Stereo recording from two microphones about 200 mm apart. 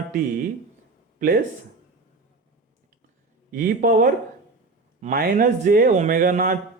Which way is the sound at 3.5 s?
45° right (ahead or behind).